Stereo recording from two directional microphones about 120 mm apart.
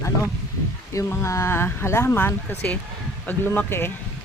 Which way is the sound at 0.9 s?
25° left (ahead or behind).